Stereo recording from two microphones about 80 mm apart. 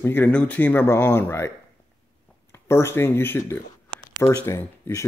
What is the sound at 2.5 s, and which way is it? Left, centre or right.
Speech, left.